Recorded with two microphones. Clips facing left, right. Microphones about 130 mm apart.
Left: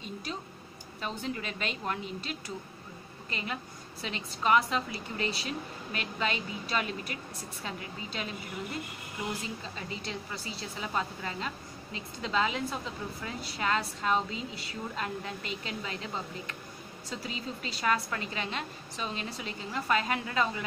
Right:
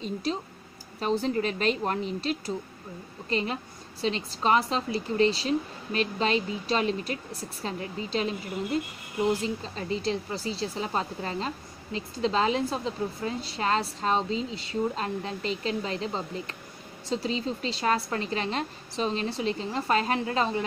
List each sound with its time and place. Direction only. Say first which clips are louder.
0.0 s a woman's voice: right 8 dB; 30° right (ahead or behind)
9.3 s speech: right 9 dB; 30° right (ahead or behind)